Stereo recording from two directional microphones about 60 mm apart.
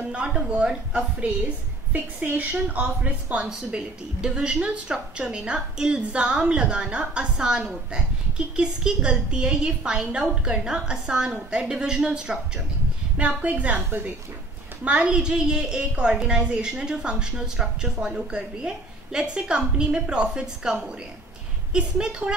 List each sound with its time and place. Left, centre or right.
0.0 s a woman's voice: centre
1.2 s a woman's voice: right
14.9 s a woman's voice: centre
21.7 s a woman's voice: centre